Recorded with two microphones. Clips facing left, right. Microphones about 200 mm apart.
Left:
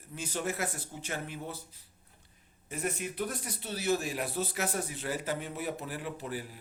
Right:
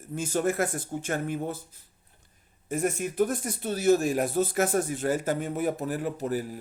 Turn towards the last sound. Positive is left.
turn(degrees=-45)  # may be behind; listen again after turning